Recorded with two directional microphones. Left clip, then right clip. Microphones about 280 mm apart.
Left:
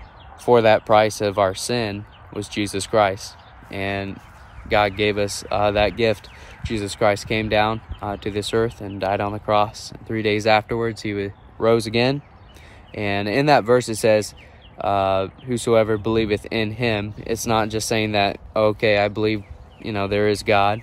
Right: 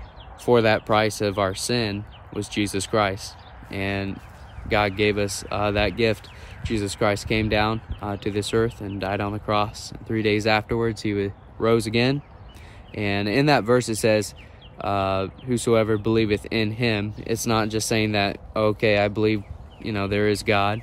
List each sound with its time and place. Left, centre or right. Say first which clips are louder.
0.5 s speech: left 4 dB; centre